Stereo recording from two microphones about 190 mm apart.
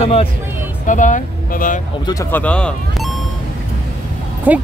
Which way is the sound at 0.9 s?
40° left (ahead or behind).